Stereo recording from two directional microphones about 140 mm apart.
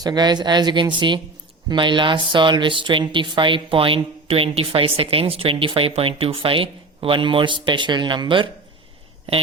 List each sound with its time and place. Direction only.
0.0 s speech: 30° right (ahead or behind)